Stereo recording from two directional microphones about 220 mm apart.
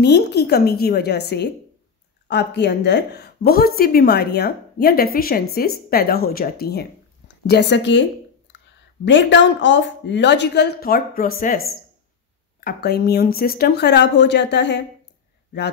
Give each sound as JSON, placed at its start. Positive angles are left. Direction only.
{"t": 0.0, "sound": "a woman's voice", "side_deg": 50}
{"t": 9.0, "sound": "a woman's voice", "side_deg": 55}